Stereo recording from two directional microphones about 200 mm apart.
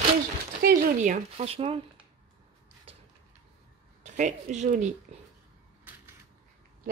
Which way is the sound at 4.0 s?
35° right (ahead or behind).